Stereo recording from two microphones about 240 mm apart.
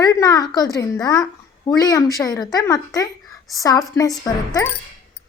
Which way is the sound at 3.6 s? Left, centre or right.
Centre.